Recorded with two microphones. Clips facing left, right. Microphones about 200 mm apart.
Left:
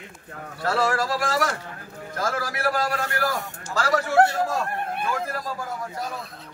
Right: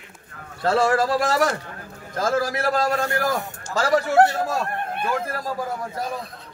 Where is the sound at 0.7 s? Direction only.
20° right (ahead or behind).